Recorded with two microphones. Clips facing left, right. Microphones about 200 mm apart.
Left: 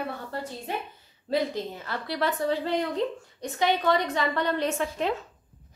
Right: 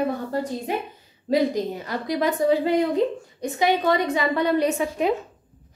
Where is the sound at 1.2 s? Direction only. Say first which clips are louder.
Right 6 dB; 15° right (ahead or behind).